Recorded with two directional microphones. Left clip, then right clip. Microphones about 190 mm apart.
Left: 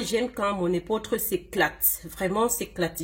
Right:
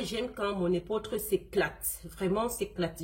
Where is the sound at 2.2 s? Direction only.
45° left (ahead or behind).